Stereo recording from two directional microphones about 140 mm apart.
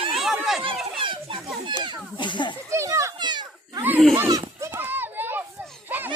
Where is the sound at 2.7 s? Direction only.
20° right (ahead or behind).